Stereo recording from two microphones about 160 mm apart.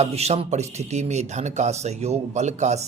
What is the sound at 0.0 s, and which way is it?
Speech, 40° right (ahead or behind).